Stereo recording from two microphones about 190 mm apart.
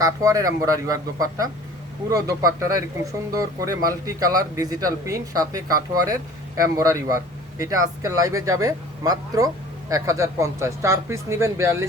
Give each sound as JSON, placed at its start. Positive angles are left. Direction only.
{"t": 0.0, "sound": "speech", "side_deg": -15}